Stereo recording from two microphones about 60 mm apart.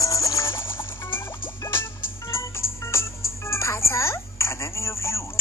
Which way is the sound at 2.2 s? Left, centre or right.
Left.